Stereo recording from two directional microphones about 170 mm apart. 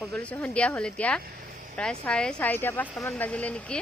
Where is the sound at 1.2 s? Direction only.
55° right (ahead or behind).